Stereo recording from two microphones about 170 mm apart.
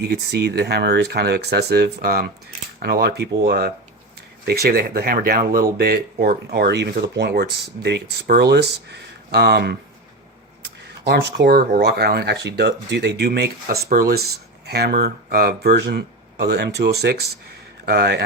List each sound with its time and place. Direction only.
0.0 s speech: 75° right (ahead or behind)
4.6 s speech: 60° right (ahead or behind); by 9.7 s 75° right (ahead or behind)
11.0 s speech: 80° right